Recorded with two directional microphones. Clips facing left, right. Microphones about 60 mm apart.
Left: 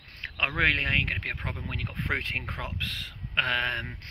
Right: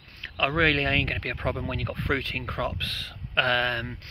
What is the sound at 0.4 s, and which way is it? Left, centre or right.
Speech, left.